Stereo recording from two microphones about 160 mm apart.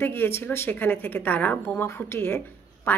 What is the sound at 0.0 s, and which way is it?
A woman's voice, 15° left (ahead or behind).